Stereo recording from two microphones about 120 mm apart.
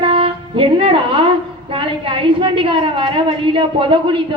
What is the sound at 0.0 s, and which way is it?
Music, 45° right (ahead or behind).